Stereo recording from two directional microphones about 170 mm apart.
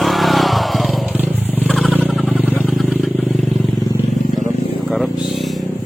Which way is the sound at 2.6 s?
Centre (ahead or behind).